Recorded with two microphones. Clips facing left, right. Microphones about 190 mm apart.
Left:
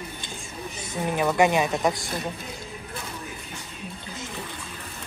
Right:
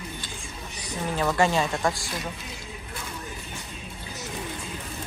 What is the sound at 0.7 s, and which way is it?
A woman's voice, 20° left (ahead or behind).